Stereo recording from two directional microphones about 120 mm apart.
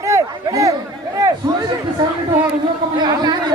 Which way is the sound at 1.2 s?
25° right (ahead or behind).